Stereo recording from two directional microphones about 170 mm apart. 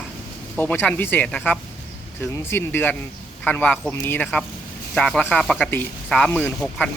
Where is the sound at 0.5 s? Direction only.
10° left (ahead or behind).